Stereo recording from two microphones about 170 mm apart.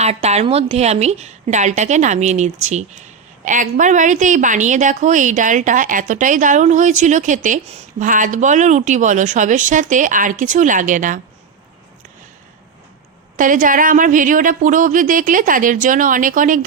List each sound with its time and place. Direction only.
0.0 s a woman's voice: 40° right (ahead or behind)
13.3 s a woman's voice: 50° right (ahead or behind)